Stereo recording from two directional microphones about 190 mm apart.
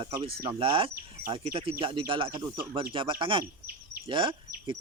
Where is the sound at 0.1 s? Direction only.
20° right (ahead or behind).